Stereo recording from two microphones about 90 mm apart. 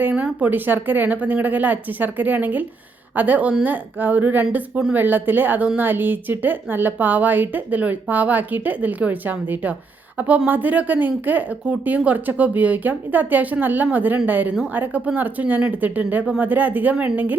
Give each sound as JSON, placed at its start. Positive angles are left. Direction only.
{"t": 0.0, "sound": "a woman's voice", "side_deg": -15}